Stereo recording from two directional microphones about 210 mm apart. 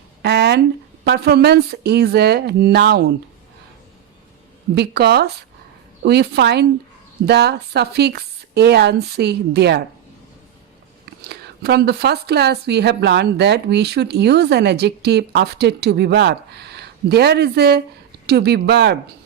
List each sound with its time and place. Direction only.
0.2 s a sound: 50° right (ahead or behind)
1.0 s a woman's voice: 50° right (ahead or behind)
4.7 s a woman's voice: 50° right (ahead or behind)
11.2 s a woman's voice: 50° right (ahead or behind)